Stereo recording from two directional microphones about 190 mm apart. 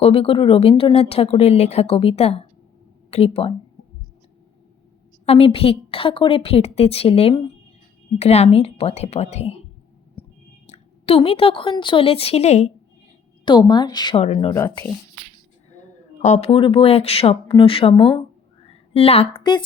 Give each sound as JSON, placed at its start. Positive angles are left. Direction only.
{"t": 0.0, "sound": "speech", "side_deg": 30}
{"t": 5.2, "sound": "speech", "side_deg": 30}
{"t": 10.7, "sound": "a woman's voice", "side_deg": 30}
{"t": 13.4, "sound": "a woman's voice", "side_deg": 25}
{"t": 15.7, "sound": "a woman's voice", "side_deg": 40}